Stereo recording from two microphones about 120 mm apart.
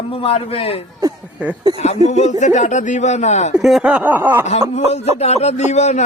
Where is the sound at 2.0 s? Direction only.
70° left (ahead or behind).